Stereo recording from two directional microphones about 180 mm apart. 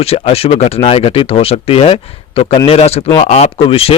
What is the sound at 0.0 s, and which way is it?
Speech, 35° left (ahead or behind).